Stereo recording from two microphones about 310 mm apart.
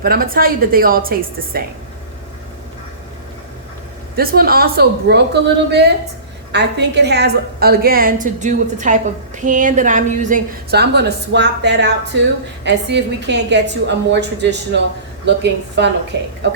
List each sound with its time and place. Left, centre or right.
0.0 s speech: right
4.2 s a woman's voice: right